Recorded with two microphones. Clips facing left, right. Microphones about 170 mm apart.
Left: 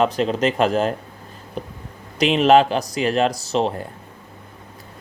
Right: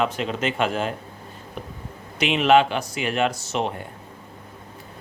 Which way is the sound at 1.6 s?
35° left (ahead or behind).